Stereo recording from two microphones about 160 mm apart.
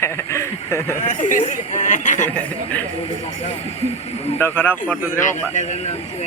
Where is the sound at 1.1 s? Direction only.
55° left (ahead or behind).